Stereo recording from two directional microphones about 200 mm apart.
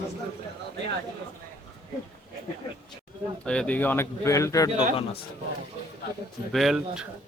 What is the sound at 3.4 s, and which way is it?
Speech, 5° left (ahead or behind).